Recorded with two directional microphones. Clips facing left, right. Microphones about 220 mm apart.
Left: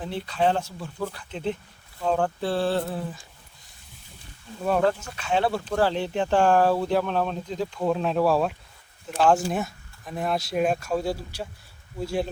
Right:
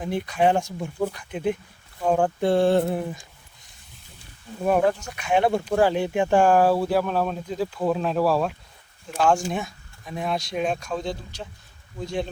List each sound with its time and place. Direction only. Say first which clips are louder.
0.0 s speech: right 3 dB; 15° right (ahead or behind)
4.6 s speech: right 2 dB; 15° right (ahead or behind); by 12.3 s 5° left (ahead or behind)